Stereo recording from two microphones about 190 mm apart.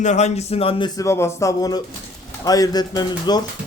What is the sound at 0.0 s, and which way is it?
Speech, 35° left (ahead or behind).